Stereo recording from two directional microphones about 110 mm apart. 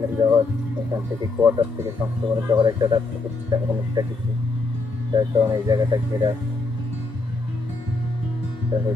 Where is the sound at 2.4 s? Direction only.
40° right (ahead or behind).